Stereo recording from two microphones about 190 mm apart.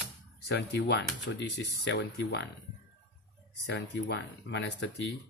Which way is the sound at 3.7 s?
60° left (ahead or behind).